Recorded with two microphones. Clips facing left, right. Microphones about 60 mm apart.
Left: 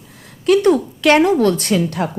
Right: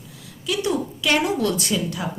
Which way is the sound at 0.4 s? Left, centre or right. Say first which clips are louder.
Left 11 dB; left.